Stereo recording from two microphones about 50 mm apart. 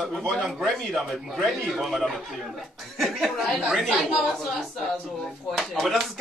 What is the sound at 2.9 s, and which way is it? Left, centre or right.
Speech, centre.